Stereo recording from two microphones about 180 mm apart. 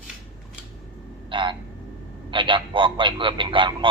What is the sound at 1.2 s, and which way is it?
A man's voice, 25° right (ahead or behind).